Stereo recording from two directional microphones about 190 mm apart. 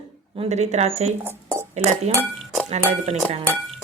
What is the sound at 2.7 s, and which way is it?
Speech, 35° right (ahead or behind).